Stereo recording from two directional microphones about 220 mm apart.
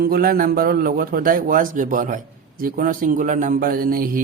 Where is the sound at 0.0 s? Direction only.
40° right (ahead or behind).